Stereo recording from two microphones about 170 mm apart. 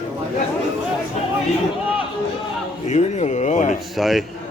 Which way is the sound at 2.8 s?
40° left (ahead or behind).